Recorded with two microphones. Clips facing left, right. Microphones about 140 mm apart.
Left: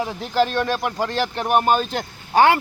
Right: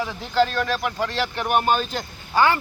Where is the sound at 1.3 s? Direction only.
40° left (ahead or behind); by 2.6 s 65° left (ahead or behind).